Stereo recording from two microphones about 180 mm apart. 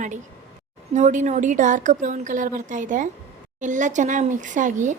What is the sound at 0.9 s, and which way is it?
Speech, 40° right (ahead or behind).